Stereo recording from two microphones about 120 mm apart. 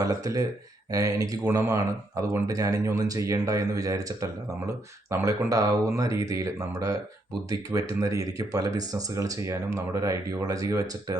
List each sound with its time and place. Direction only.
0.0 s speech: 30° right (ahead or behind)